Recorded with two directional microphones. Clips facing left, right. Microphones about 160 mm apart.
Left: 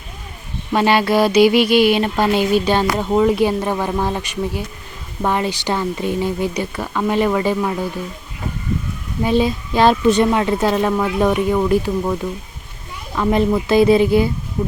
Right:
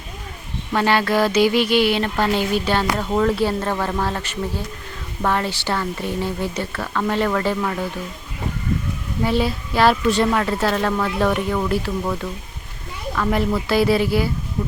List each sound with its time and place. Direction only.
0.7 s mantra: 15° left (ahead or behind)
9.2 s mantra: 20° left (ahead or behind)
13.1 s speech: 20° left (ahead or behind)